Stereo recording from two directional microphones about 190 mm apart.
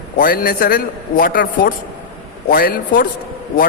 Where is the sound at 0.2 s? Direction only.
50° left (ahead or behind).